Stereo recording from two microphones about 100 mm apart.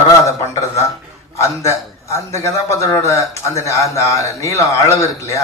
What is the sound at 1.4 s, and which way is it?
A man's voice, 30° left (ahead or behind).